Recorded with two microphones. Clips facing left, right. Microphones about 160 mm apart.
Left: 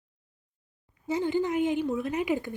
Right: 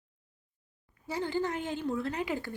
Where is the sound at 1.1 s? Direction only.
20° left (ahead or behind).